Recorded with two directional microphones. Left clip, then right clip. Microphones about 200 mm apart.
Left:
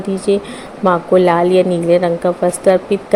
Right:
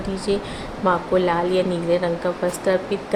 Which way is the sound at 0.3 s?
30° left (ahead or behind).